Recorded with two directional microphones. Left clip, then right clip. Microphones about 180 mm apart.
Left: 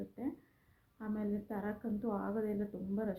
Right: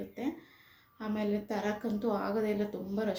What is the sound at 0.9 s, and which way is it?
Speech, 10° right (ahead or behind).